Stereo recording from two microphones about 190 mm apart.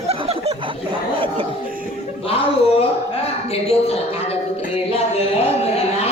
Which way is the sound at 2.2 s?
30° left (ahead or behind).